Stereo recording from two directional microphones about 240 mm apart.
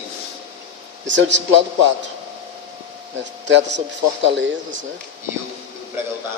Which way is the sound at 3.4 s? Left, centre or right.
Right.